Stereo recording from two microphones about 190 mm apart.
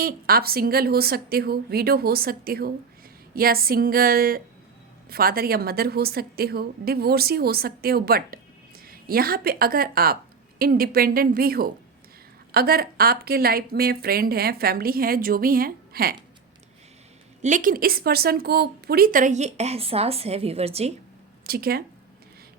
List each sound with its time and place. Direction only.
0.0 s speech: 50° right (ahead or behind)
17.4 s speech: 45° right (ahead or behind)
21.4 s speech: 50° right (ahead or behind)